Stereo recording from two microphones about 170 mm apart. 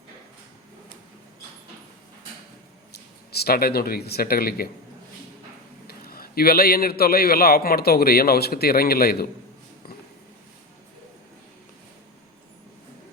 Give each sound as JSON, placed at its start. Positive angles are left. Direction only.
{"t": 3.3, "sound": "a man's voice", "side_deg": 65}
{"t": 5.9, "sound": "a man's voice", "side_deg": 65}